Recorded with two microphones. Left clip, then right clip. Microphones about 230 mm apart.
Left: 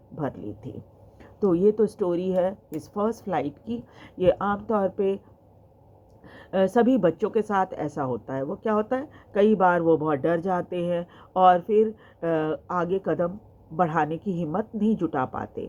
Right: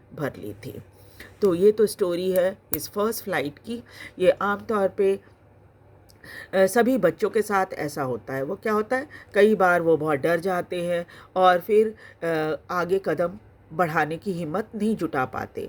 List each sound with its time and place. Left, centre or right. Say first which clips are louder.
0.2 s speech: right 1 dB; right
1.5 s speech: right 2 dB; right
6.2 s speech: right 3 dB; right